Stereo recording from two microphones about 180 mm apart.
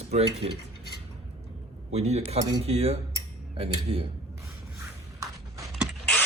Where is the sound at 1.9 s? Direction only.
35° right (ahead or behind).